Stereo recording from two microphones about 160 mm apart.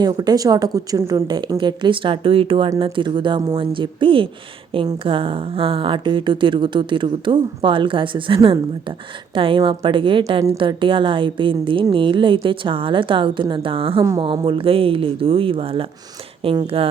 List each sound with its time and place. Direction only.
0.0 s a woman's voice: 25° right (ahead or behind)